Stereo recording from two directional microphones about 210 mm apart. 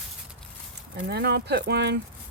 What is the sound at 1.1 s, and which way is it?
Speech, 50° right (ahead or behind).